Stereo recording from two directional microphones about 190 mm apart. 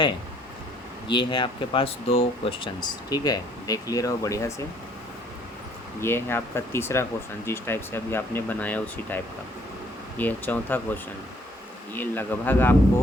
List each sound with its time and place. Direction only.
1.1 s speech: 25° left (ahead or behind)
6.0 s speech: 10° left (ahead or behind)